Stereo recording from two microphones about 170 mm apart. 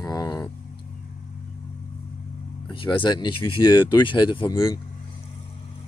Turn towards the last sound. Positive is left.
turn(degrees=20)  # may be behind; listen again after turning